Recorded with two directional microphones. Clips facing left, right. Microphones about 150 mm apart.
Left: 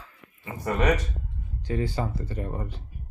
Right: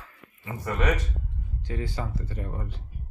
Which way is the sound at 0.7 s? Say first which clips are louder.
Left 3 dB; 25° left (ahead or behind).